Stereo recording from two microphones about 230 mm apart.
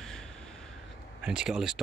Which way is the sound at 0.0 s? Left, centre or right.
Centre.